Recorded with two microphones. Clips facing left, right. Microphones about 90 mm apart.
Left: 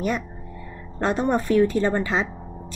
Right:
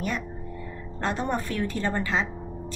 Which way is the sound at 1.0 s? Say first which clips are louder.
Left 6 dB; 20° left (ahead or behind).